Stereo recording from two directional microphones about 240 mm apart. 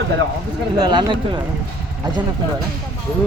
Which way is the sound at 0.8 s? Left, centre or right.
Centre.